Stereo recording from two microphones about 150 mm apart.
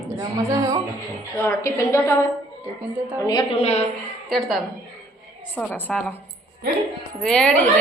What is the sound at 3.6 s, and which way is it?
Speech, 45° left (ahead or behind).